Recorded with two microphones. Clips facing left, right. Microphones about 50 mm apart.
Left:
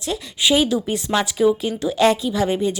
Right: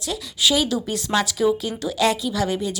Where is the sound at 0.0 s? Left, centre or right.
Left.